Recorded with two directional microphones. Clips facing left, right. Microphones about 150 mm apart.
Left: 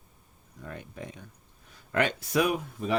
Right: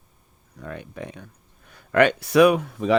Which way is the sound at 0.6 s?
90° right.